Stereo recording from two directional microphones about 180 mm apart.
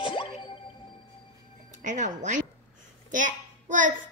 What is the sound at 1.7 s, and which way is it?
Speech, 45° right (ahead or behind).